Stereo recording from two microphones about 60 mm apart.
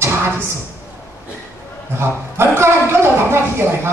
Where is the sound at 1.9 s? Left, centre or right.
Right.